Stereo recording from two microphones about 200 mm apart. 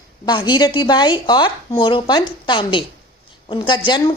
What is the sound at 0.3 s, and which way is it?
Speech, 20° left (ahead or behind).